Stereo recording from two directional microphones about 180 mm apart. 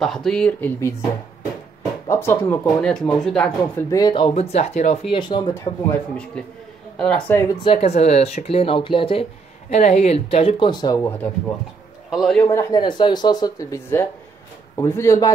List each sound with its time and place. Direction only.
0.0 s speech: centre (ahead or behind)
2.0 s speech: 15° left (ahead or behind)
3.9 s speech: 25° left (ahead or behind)
4.3 s speech: 35° left (ahead or behind); by 5.9 s 15° left (ahead or behind)
7.0 s speech: 10° left (ahead or behind)
7.6 s speech: 35° left (ahead or behind)
9.7 s speech: 40° left (ahead or behind); by 11.1 s 25° left (ahead or behind)
12.1 s a man's voice: centre (ahead or behind)
12.4 s speech: 15° left (ahead or behind)